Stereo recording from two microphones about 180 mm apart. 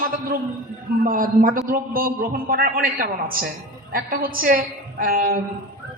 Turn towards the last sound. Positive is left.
turn(degrees=-50)  # may be behind; listen again after turning